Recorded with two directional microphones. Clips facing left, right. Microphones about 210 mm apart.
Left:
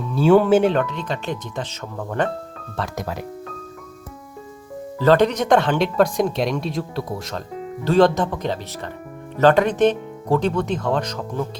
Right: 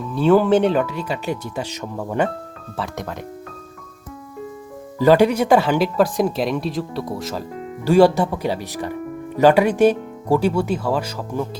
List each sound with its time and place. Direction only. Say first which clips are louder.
0.0 s speech: even; 5° left (ahead or behind)
4.9 s speech: right 2 dB; 10° right (ahead or behind)